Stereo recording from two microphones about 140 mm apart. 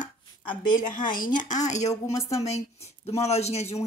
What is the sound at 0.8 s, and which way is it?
Speech, 75° left (ahead or behind).